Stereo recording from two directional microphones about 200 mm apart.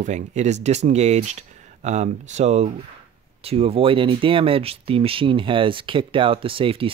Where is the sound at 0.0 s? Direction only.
35° right (ahead or behind).